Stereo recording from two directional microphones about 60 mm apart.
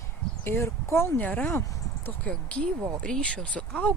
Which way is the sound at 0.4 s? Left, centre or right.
Left.